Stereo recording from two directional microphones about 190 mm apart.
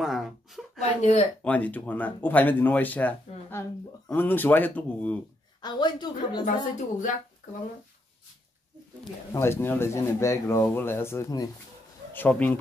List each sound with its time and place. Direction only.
0.0 s a sound: centre (ahead or behind)
0.7 s a woman's voice: 35° left (ahead or behind)
1.4 s speech: 10° left (ahead or behind)
5.6 s a woman's voice: 25° left (ahead or behind)
6.4 s a woman's voice: 45° left (ahead or behind)
9.3 s speech: 15° left (ahead or behind)